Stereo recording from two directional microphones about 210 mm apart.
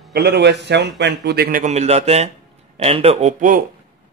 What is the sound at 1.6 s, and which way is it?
Speech, 30° right (ahead or behind).